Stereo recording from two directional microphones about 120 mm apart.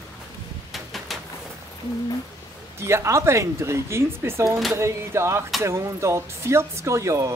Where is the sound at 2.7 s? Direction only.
20° right (ahead or behind).